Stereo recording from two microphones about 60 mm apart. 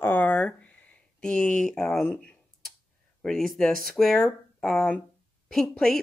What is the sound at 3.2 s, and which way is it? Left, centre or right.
A woman's voice, centre.